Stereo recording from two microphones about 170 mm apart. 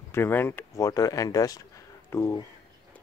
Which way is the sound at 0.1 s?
15° left (ahead or behind).